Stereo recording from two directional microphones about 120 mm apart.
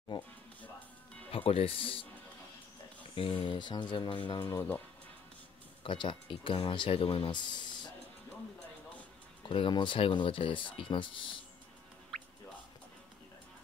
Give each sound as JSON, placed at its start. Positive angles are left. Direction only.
{"t": 1.3, "sound": "speech", "side_deg": 50}
{"t": 3.2, "sound": "speech", "side_deg": 50}
{"t": 5.9, "sound": "speech", "side_deg": 45}
{"t": 9.5, "sound": "speech", "side_deg": 45}